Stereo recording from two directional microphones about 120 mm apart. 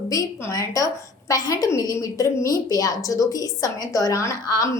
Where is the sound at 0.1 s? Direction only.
30° left (ahead or behind).